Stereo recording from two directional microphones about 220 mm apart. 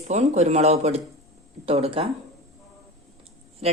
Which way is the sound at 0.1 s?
30° right (ahead or behind).